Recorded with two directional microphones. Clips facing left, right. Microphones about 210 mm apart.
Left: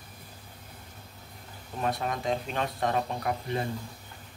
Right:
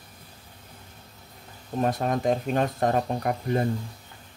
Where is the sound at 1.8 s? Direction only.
45° right (ahead or behind).